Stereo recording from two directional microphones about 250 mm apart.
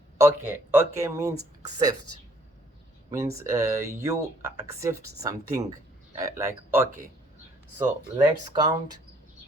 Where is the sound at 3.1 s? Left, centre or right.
Centre.